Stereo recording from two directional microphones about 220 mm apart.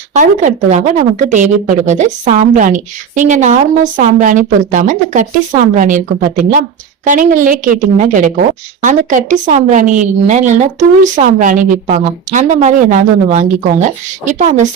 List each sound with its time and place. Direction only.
0.1 s a woman's voice: 35° right (ahead or behind)